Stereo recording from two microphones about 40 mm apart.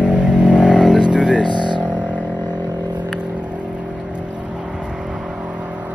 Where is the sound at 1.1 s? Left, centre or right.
Centre.